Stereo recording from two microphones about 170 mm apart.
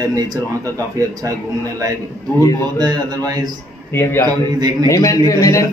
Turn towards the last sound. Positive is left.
turn(degrees=20)  # may be behind; listen again after turning